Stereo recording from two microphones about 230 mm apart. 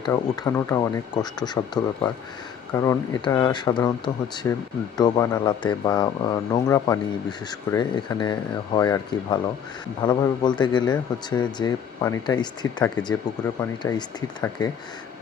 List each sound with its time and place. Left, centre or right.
0.0 s speech: centre